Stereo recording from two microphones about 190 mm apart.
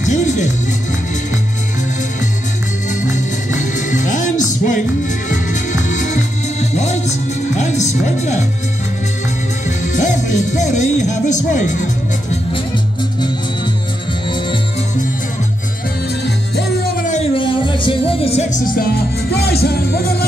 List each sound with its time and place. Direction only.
0.0 s music: 40° left (ahead or behind)
2.9 s music: 40° left (ahead or behind)
9.7 s music: 40° left (ahead or behind)
17.1 s music: 30° left (ahead or behind)
19.3 s music: 55° left (ahead or behind)